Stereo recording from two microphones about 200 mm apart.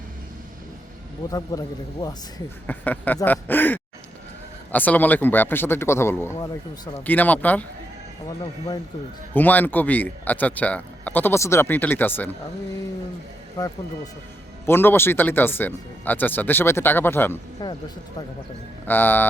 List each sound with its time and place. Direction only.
1.3 s a man's voice: 20° left (ahead or behind)
2.6 s a man's voice: 10° left (ahead or behind)
7.0 s speech: 10° left (ahead or behind)
9.3 s speech: 10° left (ahead or behind)
14.7 s speech: 10° left (ahead or behind)
18.9 s speech: 10° left (ahead or behind)